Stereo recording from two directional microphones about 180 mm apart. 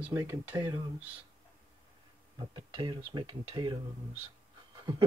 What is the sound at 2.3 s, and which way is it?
Speech, 25° right (ahead or behind).